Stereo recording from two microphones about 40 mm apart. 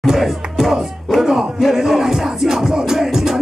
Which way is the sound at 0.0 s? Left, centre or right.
Centre.